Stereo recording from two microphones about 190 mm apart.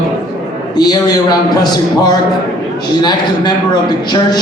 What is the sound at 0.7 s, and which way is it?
A man's voice, 20° left (ahead or behind).